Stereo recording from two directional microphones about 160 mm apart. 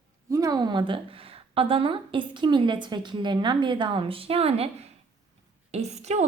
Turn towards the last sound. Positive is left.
turn(degrees=-45)  # may be behind; listen again after turning